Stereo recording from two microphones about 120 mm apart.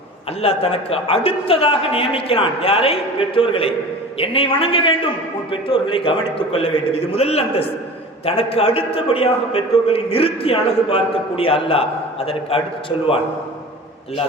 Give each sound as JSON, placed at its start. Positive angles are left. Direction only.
{"t": 0.4, "sound": "a man's voice", "side_deg": 55}